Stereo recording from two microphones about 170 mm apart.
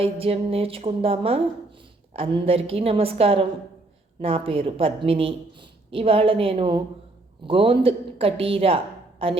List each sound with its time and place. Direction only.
0.0 s a woman's voice: 35° right (ahead or behind)